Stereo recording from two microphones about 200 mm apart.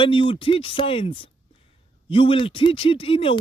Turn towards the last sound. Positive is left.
turn(degrees=25)  # may be behind; listen again after turning